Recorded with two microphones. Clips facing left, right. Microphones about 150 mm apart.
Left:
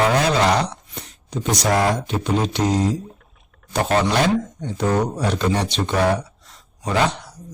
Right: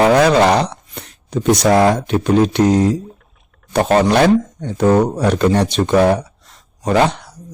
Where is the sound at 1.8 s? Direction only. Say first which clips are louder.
Right 7 dB; 60° right (ahead or behind).